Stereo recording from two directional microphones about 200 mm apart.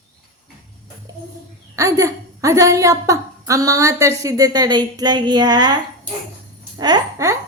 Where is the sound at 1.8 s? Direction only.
15° right (ahead or behind).